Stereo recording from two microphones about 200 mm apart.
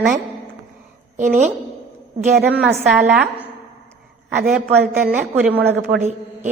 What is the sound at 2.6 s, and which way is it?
Speech, 5° right (ahead or behind).